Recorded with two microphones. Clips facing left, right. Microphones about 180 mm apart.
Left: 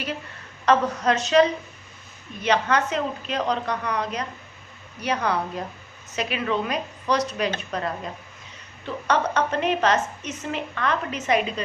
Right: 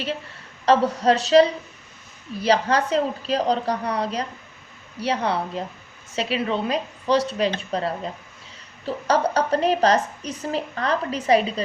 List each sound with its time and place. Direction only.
0.6 s a woman's voice: 30° right (ahead or behind)